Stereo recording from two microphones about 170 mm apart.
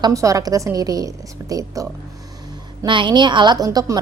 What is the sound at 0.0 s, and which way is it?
A woman's voice, 20° right (ahead or behind).